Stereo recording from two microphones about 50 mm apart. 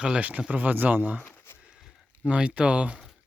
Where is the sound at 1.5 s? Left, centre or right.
Left.